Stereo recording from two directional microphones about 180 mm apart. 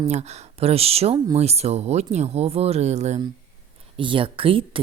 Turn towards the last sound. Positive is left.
turn(degrees=-30)  # may be behind; listen again after turning